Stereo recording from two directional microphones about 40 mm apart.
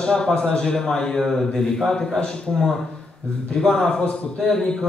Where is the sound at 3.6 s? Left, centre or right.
Centre.